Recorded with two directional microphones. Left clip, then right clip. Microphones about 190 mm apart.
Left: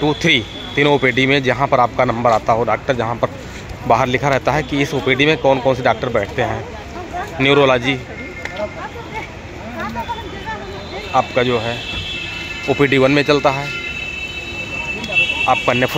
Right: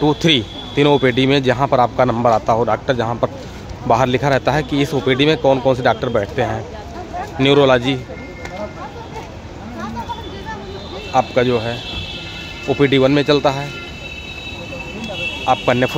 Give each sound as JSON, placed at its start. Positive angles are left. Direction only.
{"t": 0.0, "sound": "a man's voice", "side_deg": -25}
{"t": 11.1, "sound": "a man's voice", "side_deg": -20}
{"t": 12.6, "sound": "speech", "side_deg": -5}
{"t": 15.4, "sound": "speech", "side_deg": -20}